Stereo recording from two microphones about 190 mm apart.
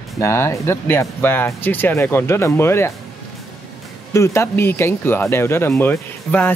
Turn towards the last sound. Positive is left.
turn(degrees=10)  # may be behind; listen again after turning